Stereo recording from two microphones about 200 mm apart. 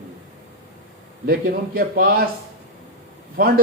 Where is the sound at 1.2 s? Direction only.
50° right (ahead or behind).